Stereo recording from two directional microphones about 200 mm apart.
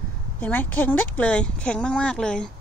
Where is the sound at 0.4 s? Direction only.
10° left (ahead or behind).